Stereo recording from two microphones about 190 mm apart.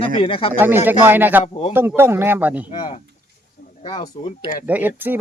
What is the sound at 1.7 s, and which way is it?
Speech, 10° right (ahead or behind).